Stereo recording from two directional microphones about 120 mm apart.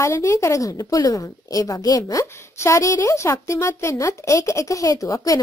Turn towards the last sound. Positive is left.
turn(degrees=30)  # may be behind; listen again after turning